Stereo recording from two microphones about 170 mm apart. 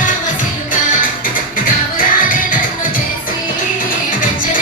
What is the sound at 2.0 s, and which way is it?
Music, 55° left (ahead or behind).